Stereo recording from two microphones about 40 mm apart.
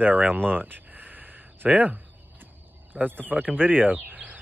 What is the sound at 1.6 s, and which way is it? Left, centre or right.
Speech, right.